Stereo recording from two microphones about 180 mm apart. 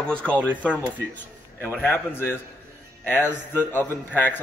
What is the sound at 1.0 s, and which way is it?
Speech, 70° right (ahead or behind).